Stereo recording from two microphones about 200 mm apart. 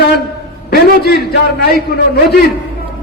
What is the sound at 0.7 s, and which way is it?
A man's voice, 50° left (ahead or behind).